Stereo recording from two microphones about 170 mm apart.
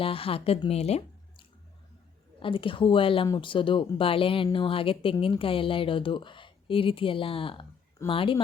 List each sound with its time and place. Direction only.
0.0 s a woman's voice: 35° left (ahead or behind)